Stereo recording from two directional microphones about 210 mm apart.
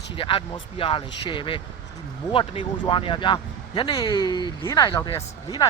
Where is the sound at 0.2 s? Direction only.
25° left (ahead or behind).